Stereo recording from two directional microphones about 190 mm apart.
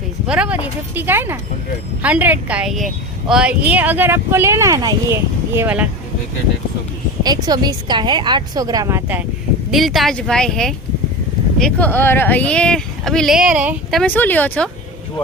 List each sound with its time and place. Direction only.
0.3 s a woman's voice: 5° right (ahead or behind)
7.2 s a woman's voice: 20° right (ahead or behind)
9.7 s speech: centre (ahead or behind)
14.0 s speech: 10° left (ahead or behind)